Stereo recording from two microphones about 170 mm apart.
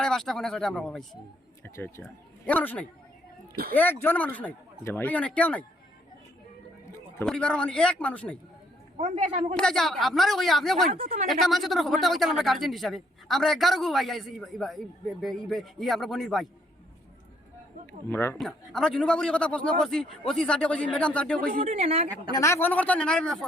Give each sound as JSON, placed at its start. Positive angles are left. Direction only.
{"t": 0.0, "sound": "speech", "side_deg": 5}
{"t": 1.6, "sound": "speech", "side_deg": 15}
{"t": 7.3, "sound": "speech", "side_deg": 5}
{"t": 9.0, "sound": "a man's voice", "side_deg": -45}
{"t": 9.6, "sound": "speech", "side_deg": 5}
{"t": 18.1, "sound": "speech", "side_deg": 15}
{"t": 18.3, "sound": "speech", "side_deg": 0}
{"t": 21.6, "sound": "a woman's voice", "side_deg": -35}
{"t": 22.3, "sound": "speech", "side_deg": 15}